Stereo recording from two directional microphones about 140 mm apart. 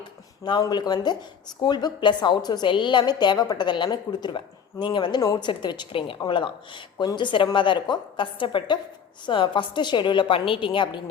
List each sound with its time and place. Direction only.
0.6 s a woman's voice: 30° left (ahead or behind)